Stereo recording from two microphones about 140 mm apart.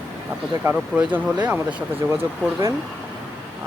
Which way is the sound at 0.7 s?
10° right (ahead or behind).